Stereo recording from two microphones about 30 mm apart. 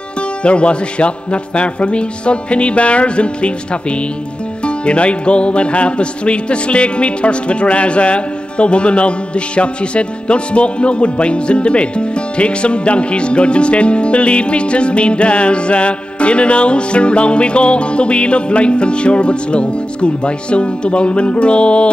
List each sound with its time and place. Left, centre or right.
0.4 s music: left
4.6 s music: left